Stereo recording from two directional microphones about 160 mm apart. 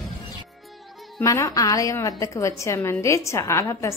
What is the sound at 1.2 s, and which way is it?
A woman's voice, 20° left (ahead or behind).